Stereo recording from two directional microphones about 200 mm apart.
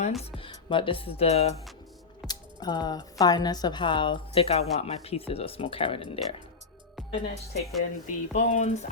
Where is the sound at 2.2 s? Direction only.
20° left (ahead or behind).